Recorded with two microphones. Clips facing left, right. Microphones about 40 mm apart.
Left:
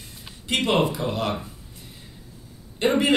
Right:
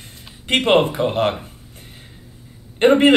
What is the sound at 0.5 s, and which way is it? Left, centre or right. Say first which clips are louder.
Speech: right 6 dB; right.